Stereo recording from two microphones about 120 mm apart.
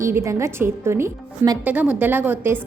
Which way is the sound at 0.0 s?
25° right (ahead or behind).